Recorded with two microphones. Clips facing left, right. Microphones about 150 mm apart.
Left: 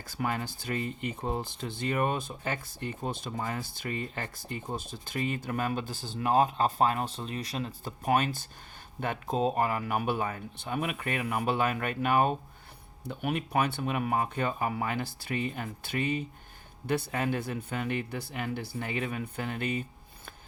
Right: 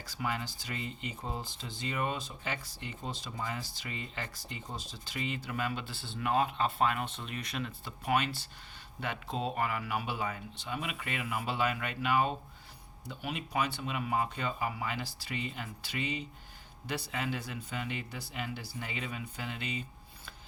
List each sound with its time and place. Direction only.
0.0 s speech: 50° left (ahead or behind)